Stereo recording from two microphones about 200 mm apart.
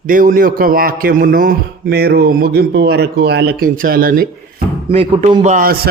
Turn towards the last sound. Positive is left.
turn(degrees=-50)  # may be behind; listen again after turning